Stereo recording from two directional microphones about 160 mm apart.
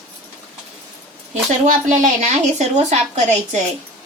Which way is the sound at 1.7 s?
50° right (ahead or behind).